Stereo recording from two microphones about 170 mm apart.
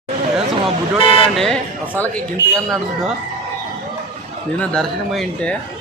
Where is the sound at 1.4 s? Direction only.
5° left (ahead or behind).